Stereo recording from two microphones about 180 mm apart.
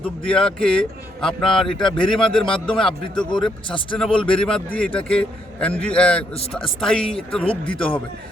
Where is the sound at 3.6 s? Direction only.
30° left (ahead or behind).